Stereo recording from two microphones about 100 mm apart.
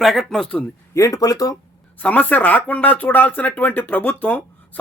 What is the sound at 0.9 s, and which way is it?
Speech, 35° left (ahead or behind).